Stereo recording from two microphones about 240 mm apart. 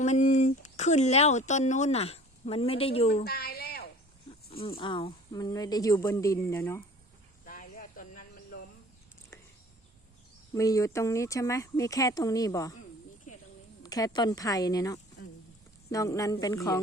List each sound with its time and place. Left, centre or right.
0.0 s speech: left
3.2 s a sound: left
4.8 s speech: left
7.4 s snake: left
10.5 s speech: centre
13.8 s speech: centre